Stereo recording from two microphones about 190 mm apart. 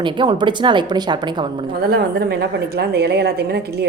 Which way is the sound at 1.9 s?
55° right (ahead or behind).